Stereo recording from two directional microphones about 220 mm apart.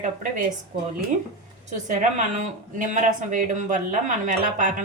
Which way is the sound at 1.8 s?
35° right (ahead or behind).